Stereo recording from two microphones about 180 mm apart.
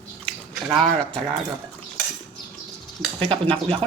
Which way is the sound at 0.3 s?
Centre (ahead or behind).